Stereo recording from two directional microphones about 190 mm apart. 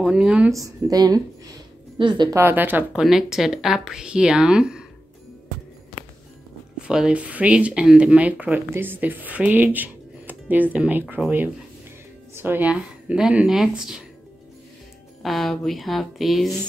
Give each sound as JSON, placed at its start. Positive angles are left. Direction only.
{"t": 0.0, "sound": "speech", "side_deg": -5}
{"t": 0.6, "sound": "speech", "side_deg": -20}
{"t": 6.9, "sound": "speech", "side_deg": -5}
{"t": 15.2, "sound": "speech", "side_deg": 0}